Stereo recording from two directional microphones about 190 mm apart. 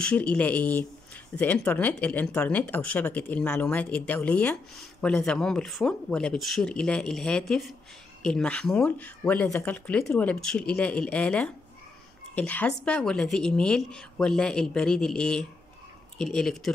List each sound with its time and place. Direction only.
0.0 s speech: 5° left (ahead or behind)